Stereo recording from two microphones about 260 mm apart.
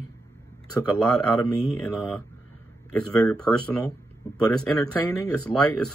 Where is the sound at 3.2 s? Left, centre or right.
Centre.